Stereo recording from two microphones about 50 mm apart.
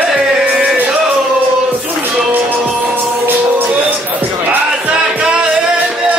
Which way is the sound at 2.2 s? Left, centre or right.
Right.